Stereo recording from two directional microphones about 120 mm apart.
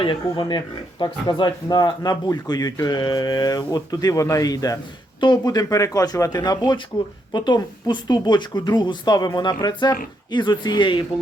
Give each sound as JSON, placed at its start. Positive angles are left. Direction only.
{"t": 0.0, "sound": "speech", "side_deg": 40}